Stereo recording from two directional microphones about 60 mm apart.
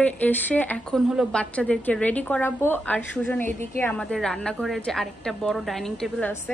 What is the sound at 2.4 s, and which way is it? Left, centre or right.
A woman's voice, left.